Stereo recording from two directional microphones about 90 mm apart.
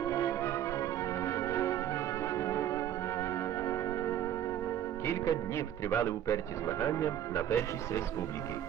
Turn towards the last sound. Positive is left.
turn(degrees=30)  # may be behind; listen again after turning